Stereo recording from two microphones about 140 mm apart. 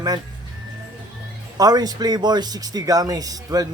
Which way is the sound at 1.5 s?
25° right (ahead or behind).